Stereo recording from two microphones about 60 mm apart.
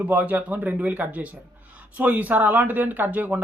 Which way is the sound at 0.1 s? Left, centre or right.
Right.